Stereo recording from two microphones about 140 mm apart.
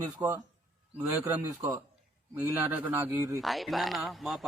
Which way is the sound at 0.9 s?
10° right (ahead or behind).